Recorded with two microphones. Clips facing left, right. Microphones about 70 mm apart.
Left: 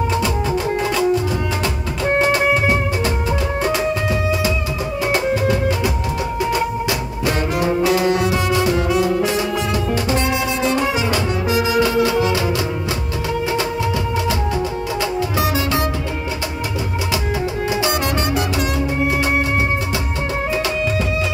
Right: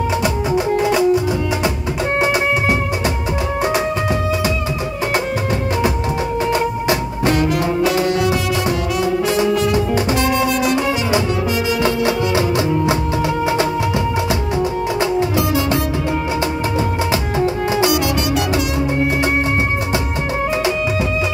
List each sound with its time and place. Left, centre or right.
0.2 s music: centre
2.1 s music: centre
6.5 s music: right
8.0 s music: left
11.8 s music: right